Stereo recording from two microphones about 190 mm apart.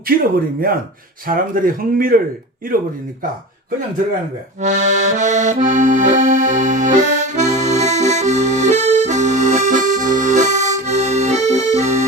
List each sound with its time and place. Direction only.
1.3 s a man's voice: 50° right (ahead or behind)
4.6 s accordion: 40° right (ahead or behind)